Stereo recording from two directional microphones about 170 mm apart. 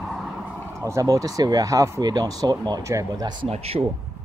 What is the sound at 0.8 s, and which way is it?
Speech, 20° right (ahead or behind).